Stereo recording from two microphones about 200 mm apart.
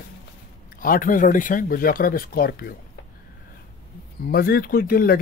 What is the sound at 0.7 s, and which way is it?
Speech, 45° left (ahead or behind).